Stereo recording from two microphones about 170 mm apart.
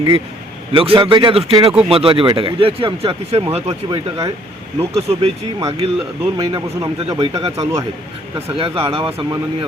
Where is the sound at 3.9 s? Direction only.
20° right (ahead or behind).